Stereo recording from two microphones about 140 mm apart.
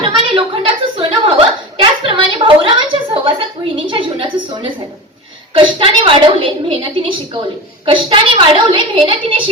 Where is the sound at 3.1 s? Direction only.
35° right (ahead or behind).